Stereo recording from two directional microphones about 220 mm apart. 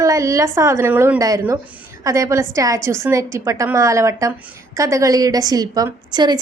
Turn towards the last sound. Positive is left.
turn(degrees=-20)  # may be behind; listen again after turning